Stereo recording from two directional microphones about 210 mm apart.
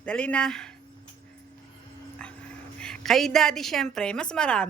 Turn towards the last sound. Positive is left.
turn(degrees=5)  # may be behind; listen again after turning